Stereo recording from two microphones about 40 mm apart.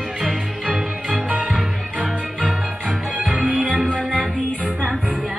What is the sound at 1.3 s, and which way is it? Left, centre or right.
Music, right.